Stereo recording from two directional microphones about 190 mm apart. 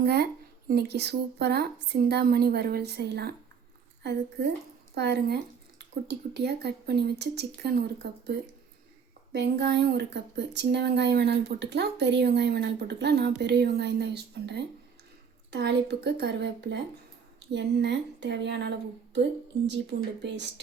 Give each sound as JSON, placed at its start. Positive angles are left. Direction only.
{"t": 0.0, "sound": "speech", "side_deg": -60}